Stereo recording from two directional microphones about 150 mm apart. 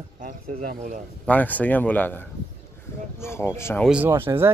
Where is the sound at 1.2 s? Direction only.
10° left (ahead or behind).